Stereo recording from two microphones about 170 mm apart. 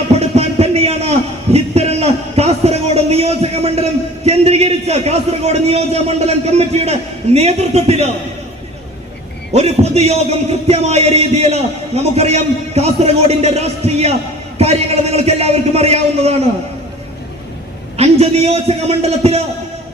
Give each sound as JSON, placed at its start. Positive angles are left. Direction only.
{"t": 0.2, "sound": "a sound", "side_deg": -35}
{"t": 4.3, "sound": "speech", "side_deg": -35}
{"t": 9.5, "sound": "speech", "side_deg": -40}
{"t": 17.9, "sound": "speech", "side_deg": -40}